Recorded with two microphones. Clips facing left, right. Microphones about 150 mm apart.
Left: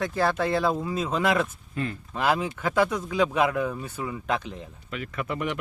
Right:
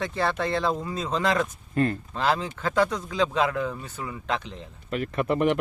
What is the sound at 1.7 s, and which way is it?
Speech, 50° right (ahead or behind).